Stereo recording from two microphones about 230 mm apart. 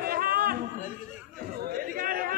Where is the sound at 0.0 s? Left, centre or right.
Right.